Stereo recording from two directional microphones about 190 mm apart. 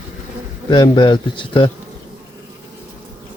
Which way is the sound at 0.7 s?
25° left (ahead or behind).